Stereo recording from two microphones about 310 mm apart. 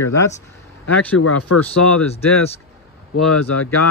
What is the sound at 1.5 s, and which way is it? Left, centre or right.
Speech, left.